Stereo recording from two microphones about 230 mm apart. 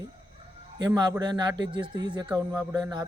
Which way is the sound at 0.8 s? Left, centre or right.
Centre.